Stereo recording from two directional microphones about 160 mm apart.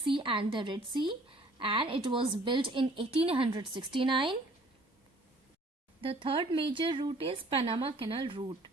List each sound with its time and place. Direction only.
0.0 s a woman's voice: 30° right (ahead or behind)
6.0 s a woman's voice: 35° right (ahead or behind)